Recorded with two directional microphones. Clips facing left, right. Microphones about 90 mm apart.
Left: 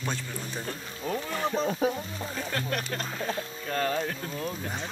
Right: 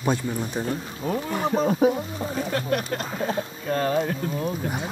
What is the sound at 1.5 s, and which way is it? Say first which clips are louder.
Speech: right 8 dB; 50° right (ahead or behind).